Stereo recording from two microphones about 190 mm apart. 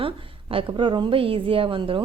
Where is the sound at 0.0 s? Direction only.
30° right (ahead or behind).